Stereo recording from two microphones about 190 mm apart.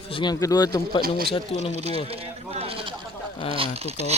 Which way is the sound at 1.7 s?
35° right (ahead or behind).